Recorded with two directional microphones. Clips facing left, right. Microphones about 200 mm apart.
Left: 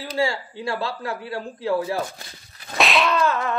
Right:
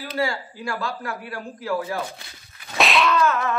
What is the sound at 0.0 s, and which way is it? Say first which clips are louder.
A man's voice: left 2 dB; 25° left (ahead or behind).